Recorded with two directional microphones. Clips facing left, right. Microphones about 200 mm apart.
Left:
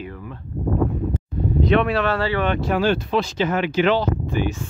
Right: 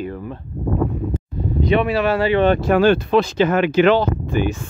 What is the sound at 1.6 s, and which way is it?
Speech, 5° right (ahead or behind).